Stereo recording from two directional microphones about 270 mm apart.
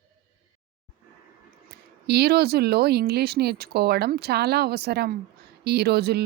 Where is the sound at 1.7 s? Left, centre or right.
Right.